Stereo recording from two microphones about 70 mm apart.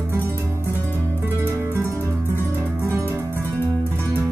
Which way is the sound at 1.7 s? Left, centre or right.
Right.